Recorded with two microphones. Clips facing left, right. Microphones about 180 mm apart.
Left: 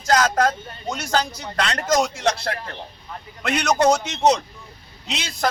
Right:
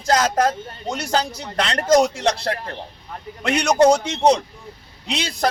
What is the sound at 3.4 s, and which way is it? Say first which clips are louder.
Speech: right 3 dB; 20° right (ahead or behind).